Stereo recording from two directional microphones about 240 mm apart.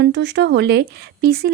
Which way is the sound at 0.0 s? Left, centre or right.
Right.